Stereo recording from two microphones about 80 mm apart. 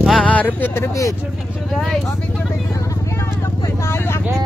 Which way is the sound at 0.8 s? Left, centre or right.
Left.